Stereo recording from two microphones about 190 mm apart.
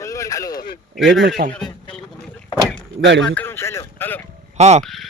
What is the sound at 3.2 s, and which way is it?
Speech, 5° left (ahead or behind).